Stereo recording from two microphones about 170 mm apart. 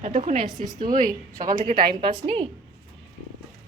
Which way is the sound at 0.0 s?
45° right (ahead or behind).